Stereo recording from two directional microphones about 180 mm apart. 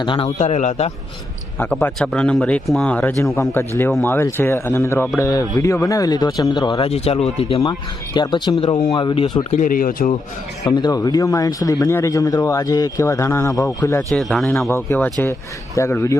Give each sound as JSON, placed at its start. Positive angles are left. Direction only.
{"t": 0.0, "sound": "a man's voice", "side_deg": 30}
{"t": 1.5, "sound": "speech", "side_deg": 5}
{"t": 9.6, "sound": "speech", "side_deg": 50}
{"t": 10.7, "sound": "speech", "side_deg": 20}
{"t": 14.1, "sound": "speech", "side_deg": 0}
{"t": 14.7, "sound": "speech", "side_deg": 15}